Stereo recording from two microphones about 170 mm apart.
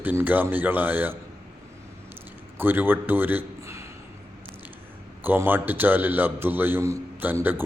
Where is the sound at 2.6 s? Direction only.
10° right (ahead or behind).